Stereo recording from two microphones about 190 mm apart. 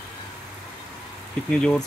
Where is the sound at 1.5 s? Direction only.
5° left (ahead or behind).